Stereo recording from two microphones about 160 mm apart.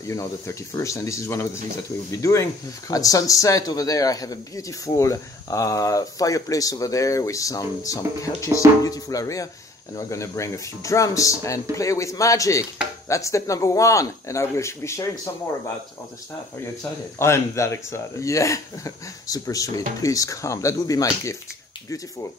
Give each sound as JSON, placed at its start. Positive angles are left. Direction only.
{"t": 0.1, "sound": "speech", "side_deg": 20}
{"t": 17.2, "sound": "speech", "side_deg": 15}